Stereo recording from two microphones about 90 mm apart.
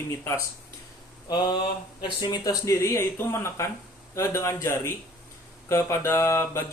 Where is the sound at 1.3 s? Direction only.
55° left (ahead or behind).